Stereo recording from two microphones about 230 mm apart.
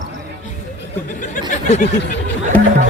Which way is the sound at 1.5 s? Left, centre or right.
Left.